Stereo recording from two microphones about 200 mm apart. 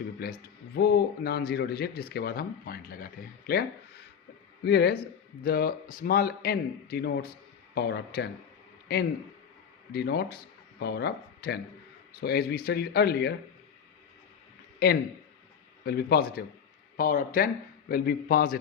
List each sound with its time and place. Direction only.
0.2 s speech: 50° left (ahead or behind)
9.9 s speech: 50° left (ahead or behind)
14.8 s speech: 50° left (ahead or behind)